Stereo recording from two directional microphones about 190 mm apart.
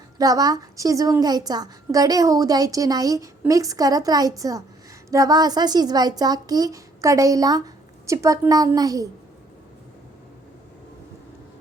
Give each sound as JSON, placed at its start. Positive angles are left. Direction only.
{"t": 0.2, "sound": "a woman's voice", "side_deg": -20}